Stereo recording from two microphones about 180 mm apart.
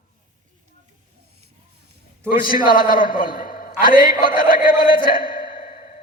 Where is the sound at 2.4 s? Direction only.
55° left (ahead or behind).